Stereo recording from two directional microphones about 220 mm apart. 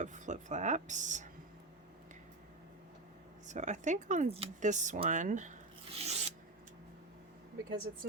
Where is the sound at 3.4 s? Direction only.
35° right (ahead or behind).